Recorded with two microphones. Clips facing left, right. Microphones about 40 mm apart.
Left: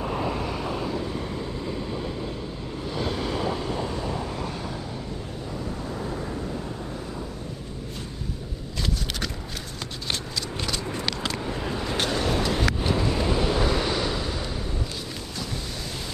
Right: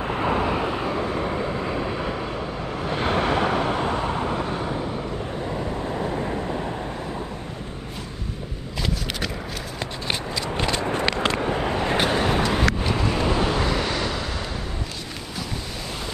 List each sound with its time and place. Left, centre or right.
0.0 s vehicle: right
5.9 s vehicle: right
10.5 s vehicle: right